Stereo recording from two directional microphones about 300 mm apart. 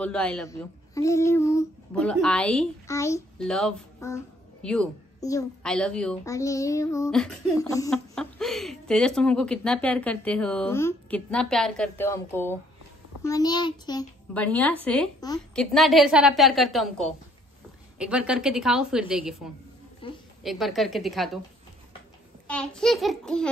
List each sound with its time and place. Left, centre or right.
0.0 s speech: centre
13.2 s a child's voice: centre
15.6 s speech: centre
20.0 s a sound: centre
20.4 s speech: centre
22.5 s speech: centre